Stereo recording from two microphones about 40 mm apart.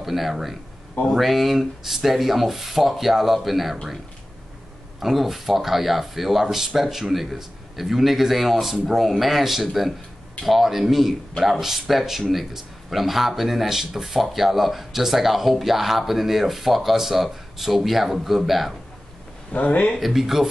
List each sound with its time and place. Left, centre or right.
0.0 s speech: centre
5.0 s speech: centre
19.5 s speech: left
20.0 s speech: centre